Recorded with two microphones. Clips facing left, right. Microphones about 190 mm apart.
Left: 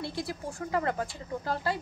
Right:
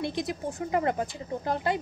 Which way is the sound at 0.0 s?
20° right (ahead or behind).